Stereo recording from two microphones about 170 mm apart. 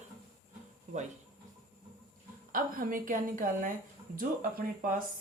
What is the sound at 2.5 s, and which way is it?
A woman's voice, 50° right (ahead or behind).